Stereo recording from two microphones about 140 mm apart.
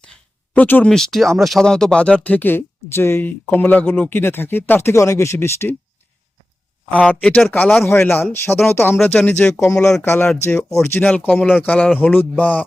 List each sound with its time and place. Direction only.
0.5 s speech: 10° left (ahead or behind)
6.9 s speech: 10° left (ahead or behind)
10.0 s speech: 15° left (ahead or behind)